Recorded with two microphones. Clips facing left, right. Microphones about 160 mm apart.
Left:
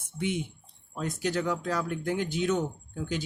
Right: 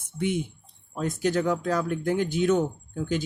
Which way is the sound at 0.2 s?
45° right (ahead or behind).